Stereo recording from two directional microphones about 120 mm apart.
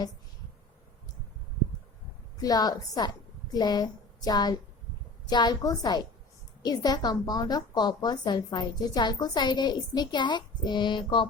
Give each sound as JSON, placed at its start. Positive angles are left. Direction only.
{"t": 2.4, "sound": "a woman's voice", "side_deg": 30}